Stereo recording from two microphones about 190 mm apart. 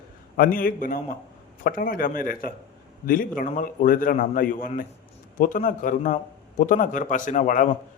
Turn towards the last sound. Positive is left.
turn(degrees=40)  # may be behind; listen again after turning